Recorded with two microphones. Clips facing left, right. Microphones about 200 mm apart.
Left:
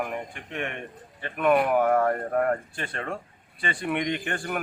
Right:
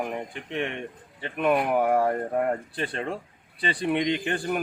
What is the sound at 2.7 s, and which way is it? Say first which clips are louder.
Speech: right 3 dB; 35° right (ahead or behind).